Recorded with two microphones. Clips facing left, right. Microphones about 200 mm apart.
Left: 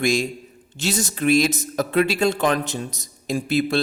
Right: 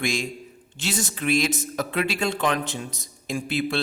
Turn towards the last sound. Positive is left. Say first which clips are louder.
# left 5 dB
turn(degrees=40)  # may be behind; listen again after turning